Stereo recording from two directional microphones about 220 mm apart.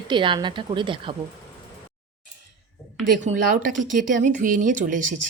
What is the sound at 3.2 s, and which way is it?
Speech, 35° right (ahead or behind).